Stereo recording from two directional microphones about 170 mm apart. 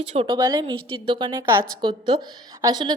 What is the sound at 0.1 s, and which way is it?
Speech, 30° right (ahead or behind).